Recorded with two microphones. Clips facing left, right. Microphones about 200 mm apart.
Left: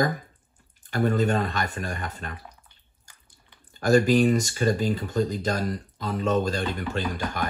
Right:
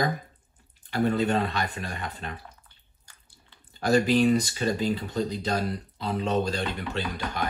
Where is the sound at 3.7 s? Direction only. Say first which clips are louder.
Left 3 dB; 45° left (ahead or behind).